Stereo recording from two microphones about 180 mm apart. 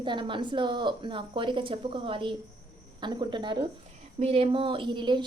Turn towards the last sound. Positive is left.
turn(degrees=-25)  # may be behind; listen again after turning